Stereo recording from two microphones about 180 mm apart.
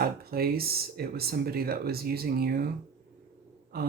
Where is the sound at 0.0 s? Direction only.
55° right (ahead or behind).